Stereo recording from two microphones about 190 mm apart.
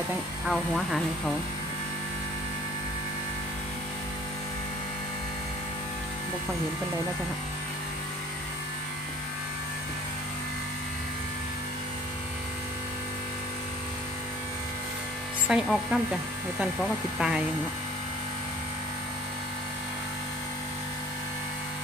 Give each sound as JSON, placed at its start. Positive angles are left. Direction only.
{"t": 0.4, "sound": "speech", "side_deg": 0}
{"t": 15.4, "sound": "speech", "side_deg": -5}
{"t": 17.2, "sound": "speech", "side_deg": -5}